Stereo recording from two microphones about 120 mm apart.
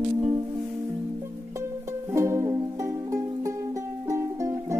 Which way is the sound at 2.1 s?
25° right (ahead or behind).